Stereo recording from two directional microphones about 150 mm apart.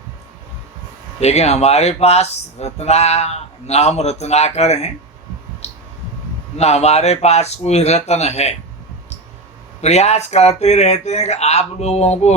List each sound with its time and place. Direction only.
1.2 s speech: 45° left (ahead or behind)
5.6 s a sound: 45° left (ahead or behind)
6.6 s speech: 45° left (ahead or behind)
9.8 s speech: 45° left (ahead or behind)